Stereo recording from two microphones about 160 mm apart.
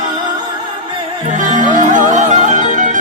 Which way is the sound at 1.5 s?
55° right (ahead or behind).